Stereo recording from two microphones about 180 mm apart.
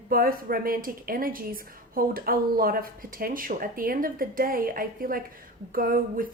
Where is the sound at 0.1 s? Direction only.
55° right (ahead or behind).